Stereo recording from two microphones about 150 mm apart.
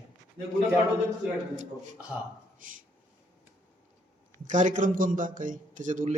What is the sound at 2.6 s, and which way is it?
Speech, 60° right (ahead or behind).